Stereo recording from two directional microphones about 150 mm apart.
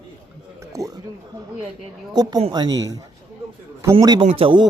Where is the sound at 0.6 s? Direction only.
20° right (ahead or behind).